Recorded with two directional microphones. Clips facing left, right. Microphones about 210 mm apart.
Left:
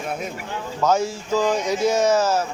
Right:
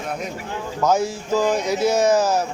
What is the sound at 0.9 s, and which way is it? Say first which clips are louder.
Speech: right 1 dB; 10° right (ahead or behind).